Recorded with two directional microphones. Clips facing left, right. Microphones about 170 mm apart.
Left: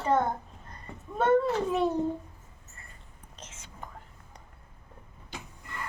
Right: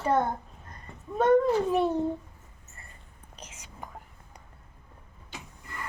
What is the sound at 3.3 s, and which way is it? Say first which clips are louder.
Whispering: right 1 dB; 10° right (ahead or behind).